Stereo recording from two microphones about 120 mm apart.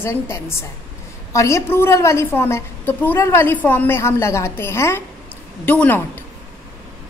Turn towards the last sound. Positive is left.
turn(degrees=15)  # may be behind; listen again after turning